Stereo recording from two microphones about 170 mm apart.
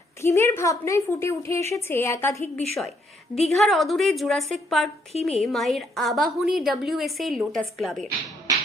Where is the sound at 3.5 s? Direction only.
Centre (ahead or behind).